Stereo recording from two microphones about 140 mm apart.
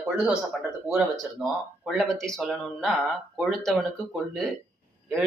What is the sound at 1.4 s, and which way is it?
Speech, centre (ahead or behind).